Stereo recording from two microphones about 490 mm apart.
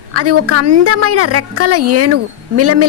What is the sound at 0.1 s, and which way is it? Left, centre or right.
A woman's voice, right.